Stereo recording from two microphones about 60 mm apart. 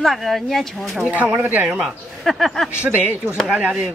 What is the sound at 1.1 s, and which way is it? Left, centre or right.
Speech, right.